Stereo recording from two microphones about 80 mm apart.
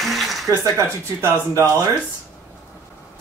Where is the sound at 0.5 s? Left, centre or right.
Right.